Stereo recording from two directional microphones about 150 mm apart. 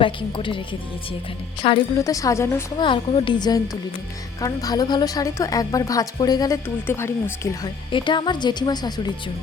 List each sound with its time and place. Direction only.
0.0 s a woman's voice: 35° left (ahead or behind)
2.0 s a woman's voice: 20° left (ahead or behind)
2.7 s a woman's voice: 30° left (ahead or behind)
6.8 s speech: 15° left (ahead or behind)
7.9 s a woman's voice: 35° left (ahead or behind)